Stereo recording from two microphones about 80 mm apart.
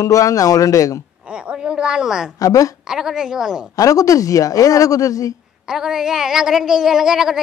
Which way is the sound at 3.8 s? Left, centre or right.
Left.